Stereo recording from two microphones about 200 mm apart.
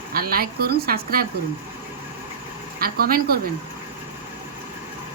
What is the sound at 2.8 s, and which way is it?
Speech, 50° right (ahead or behind).